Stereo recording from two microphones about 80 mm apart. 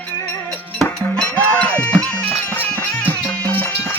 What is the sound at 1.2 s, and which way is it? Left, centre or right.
Music, centre.